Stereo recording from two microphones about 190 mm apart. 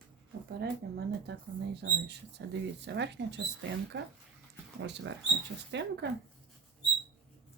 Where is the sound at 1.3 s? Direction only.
60° right (ahead or behind).